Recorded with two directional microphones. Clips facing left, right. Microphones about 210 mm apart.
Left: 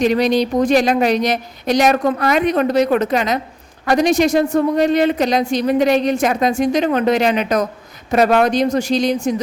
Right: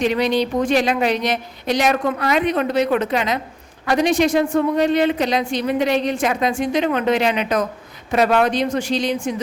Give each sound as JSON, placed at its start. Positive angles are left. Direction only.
{"t": 0.0, "sound": "a woman's voice", "side_deg": 40}